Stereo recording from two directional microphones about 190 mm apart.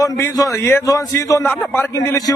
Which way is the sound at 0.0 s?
20° left (ahead or behind).